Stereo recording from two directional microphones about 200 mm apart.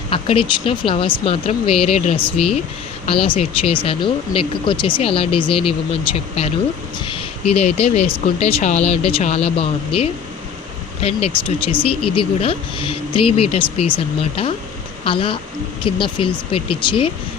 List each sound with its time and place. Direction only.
0.1 s speech: 25° left (ahead or behind)